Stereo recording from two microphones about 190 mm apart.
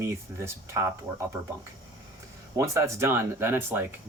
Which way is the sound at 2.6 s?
15° right (ahead or behind).